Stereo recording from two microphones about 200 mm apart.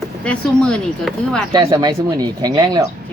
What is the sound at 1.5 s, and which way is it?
Speech, 20° right (ahead or behind).